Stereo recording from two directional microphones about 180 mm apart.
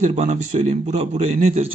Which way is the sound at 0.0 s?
40° right (ahead or behind).